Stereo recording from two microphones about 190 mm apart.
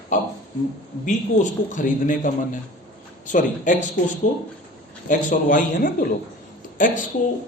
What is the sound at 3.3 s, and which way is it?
Speech, 45° left (ahead or behind).